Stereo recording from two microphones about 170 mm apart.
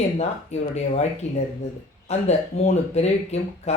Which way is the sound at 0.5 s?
40° left (ahead or behind).